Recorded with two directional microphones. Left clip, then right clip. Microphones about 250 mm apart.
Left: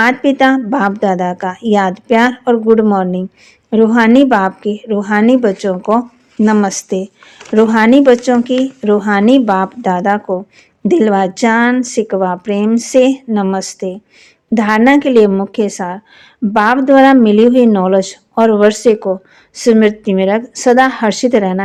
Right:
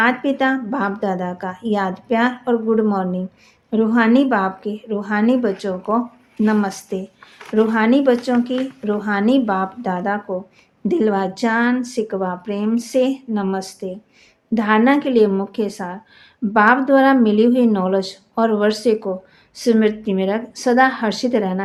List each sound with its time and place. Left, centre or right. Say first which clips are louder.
0.0 s a woman's voice: left 7 dB; left